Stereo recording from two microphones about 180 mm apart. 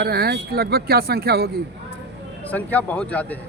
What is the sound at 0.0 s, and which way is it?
Speech, 60° right (ahead or behind).